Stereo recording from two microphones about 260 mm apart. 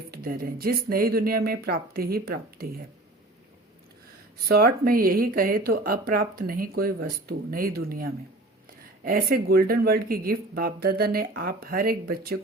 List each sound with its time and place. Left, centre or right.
0.1 s speech: right
4.4 s speech: right